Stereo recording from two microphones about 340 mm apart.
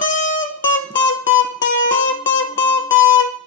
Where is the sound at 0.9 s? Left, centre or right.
Left.